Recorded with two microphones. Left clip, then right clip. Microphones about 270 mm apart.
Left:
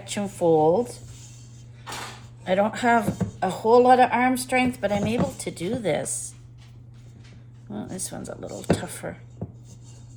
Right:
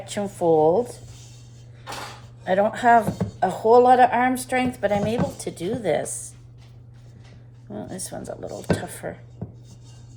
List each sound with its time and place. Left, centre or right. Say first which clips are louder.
0.1 s speech: right 1 dB; left
2.4 s speech: right 3 dB; left
7.7 s speech: right 1 dB; left